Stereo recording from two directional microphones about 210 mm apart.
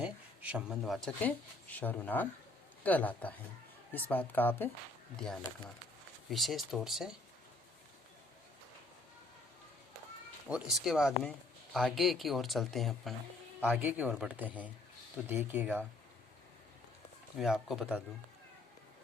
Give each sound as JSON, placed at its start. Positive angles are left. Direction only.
{"t": 0.0, "sound": "speech", "side_deg": -5}
{"t": 10.5, "sound": "speech", "side_deg": -5}
{"t": 17.3, "sound": "speech", "side_deg": 0}